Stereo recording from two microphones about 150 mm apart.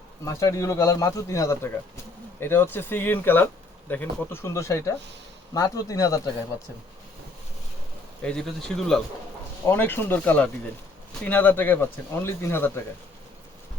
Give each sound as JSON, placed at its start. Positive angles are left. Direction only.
{"t": 0.3, "sound": "speech", "side_deg": 20}
{"t": 8.2, "sound": "speech", "side_deg": 5}
{"t": 9.6, "sound": "speech", "side_deg": 15}